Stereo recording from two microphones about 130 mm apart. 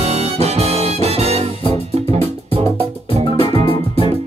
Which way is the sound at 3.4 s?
45° left (ahead or behind).